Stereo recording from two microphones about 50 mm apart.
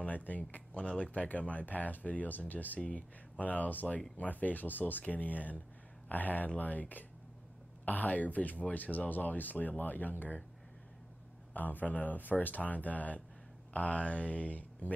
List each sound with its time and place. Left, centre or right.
0.0 s speech: left
11.5 s speech: left